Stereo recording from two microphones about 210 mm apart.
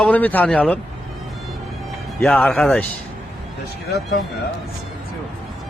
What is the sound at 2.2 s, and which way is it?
Speech, 5° left (ahead or behind).